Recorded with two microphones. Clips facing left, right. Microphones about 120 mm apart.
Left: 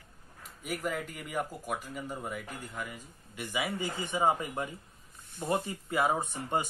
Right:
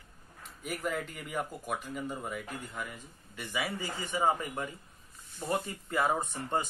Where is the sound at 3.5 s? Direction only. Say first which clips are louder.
Left 2 dB; 15° left (ahead or behind).